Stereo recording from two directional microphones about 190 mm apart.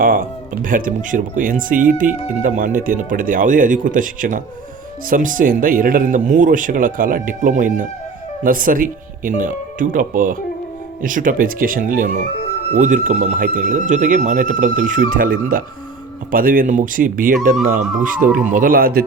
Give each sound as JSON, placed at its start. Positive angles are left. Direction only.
{"t": 0.0, "sound": "speech", "side_deg": -50}